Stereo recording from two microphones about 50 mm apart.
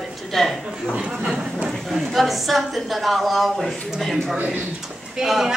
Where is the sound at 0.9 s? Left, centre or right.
Centre.